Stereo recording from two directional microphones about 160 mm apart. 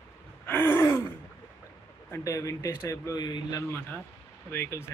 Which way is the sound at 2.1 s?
20° left (ahead or behind).